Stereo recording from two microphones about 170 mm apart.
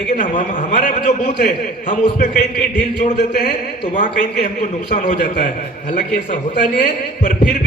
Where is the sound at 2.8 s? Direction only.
85° left.